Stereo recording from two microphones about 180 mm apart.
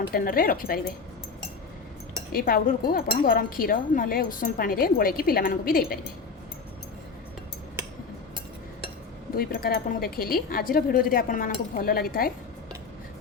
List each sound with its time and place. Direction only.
0.1 s speech: 55° left (ahead or behind)
2.3 s speech: 50° left (ahead or behind)
9.3 s speech: 55° left (ahead or behind)